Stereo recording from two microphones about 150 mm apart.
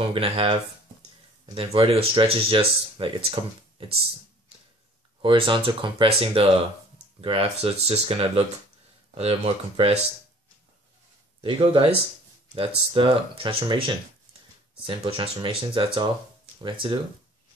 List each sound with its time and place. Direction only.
0.0 s speech: 35° right (ahead or behind)
5.2 s speech: 35° right (ahead or behind)
11.4 s speech: 35° right (ahead or behind)